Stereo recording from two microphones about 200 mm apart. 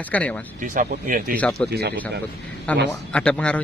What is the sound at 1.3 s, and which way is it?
Speech, 5° left (ahead or behind).